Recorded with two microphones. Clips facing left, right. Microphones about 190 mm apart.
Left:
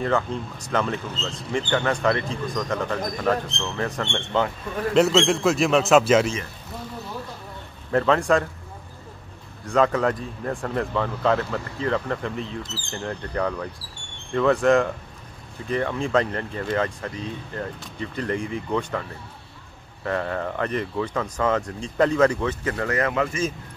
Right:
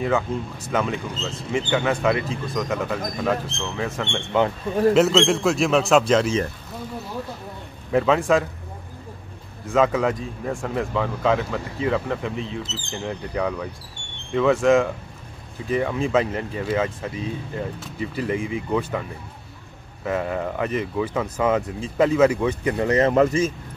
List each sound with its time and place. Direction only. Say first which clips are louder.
0.0 s speech: right 1 dB; 5° right (ahead or behind)
7.9 s speech: right 1 dB; 5° right (ahead or behind)
9.7 s speech: right 1 dB; 5° right (ahead or behind)
20.1 s speech: right 2 dB; 10° right (ahead or behind)